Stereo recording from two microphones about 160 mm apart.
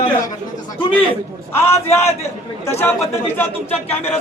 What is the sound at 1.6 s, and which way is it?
Speech, 15° left (ahead or behind).